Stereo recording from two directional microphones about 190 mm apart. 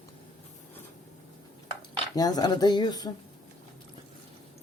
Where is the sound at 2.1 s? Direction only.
20° left (ahead or behind).